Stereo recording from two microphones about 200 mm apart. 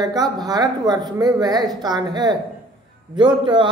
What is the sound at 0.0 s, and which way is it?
Speech, 20° right (ahead or behind).